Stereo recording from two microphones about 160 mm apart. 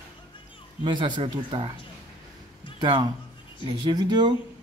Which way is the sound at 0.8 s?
30° right (ahead or behind).